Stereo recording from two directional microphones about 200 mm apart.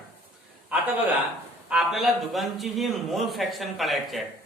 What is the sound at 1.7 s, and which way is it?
A man's voice, centre (ahead or behind).